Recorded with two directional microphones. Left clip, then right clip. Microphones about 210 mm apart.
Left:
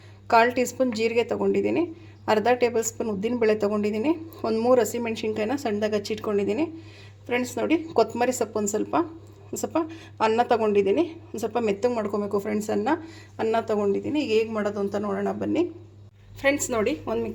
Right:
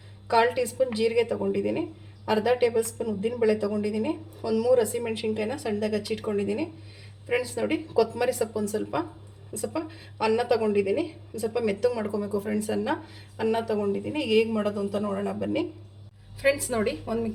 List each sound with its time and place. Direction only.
0.3 s speech: 40° left (ahead or behind)